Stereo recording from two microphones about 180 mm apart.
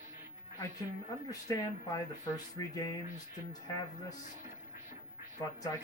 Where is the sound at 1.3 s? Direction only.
20° left (ahead or behind).